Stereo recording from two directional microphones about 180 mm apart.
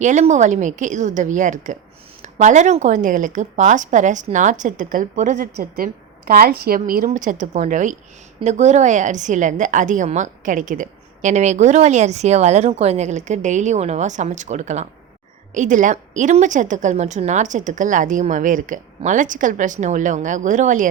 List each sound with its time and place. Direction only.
0.0 s a woman's voice: 40° right (ahead or behind)
5.5 s a woman's voice: 55° right (ahead or behind)